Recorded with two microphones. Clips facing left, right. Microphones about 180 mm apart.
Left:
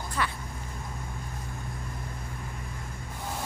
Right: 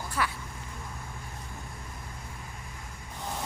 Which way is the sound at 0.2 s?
5° right (ahead or behind).